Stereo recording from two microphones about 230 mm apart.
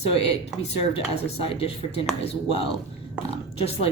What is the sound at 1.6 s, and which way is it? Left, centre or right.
Speech, left.